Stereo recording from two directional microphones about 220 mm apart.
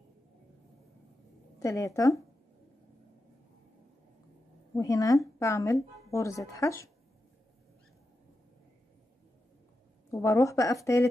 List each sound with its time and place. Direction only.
1.6 s speech: 15° left (ahead or behind)
4.7 s speech: 15° left (ahead or behind)
10.1 s speech: 15° left (ahead or behind)